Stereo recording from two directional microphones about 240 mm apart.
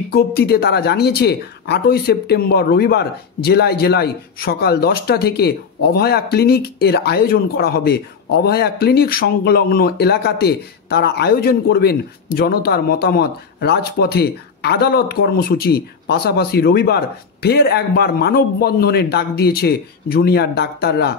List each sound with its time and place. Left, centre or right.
0.1 s speech: left